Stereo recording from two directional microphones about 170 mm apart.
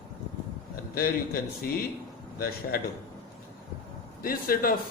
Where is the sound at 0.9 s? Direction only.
60° left (ahead or behind).